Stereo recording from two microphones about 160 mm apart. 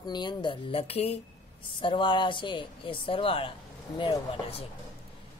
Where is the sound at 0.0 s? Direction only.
25° left (ahead or behind).